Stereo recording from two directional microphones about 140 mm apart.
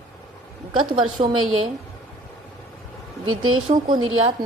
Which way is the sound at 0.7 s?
35° right (ahead or behind).